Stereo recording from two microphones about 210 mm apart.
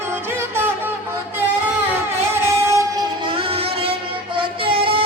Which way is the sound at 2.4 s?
15° right (ahead or behind).